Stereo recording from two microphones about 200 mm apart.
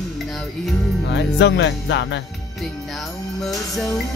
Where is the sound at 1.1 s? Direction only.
60° left (ahead or behind).